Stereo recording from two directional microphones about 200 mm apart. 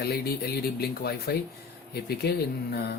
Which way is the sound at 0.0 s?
50° left (ahead or behind).